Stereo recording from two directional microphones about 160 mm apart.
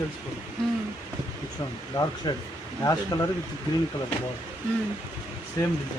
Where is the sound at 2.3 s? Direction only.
25° left (ahead or behind).